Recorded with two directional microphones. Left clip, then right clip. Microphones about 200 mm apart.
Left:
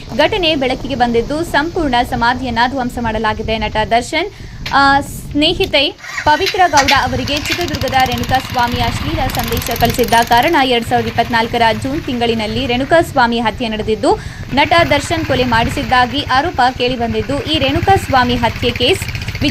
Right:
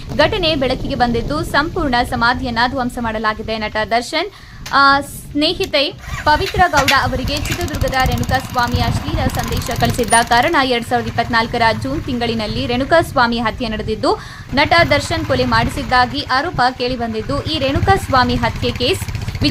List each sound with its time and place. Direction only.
0.2 s speech: centre (ahead or behind)
7.4 s speech: 40° right (ahead or behind)
8.3 s speech: 5° left (ahead or behind)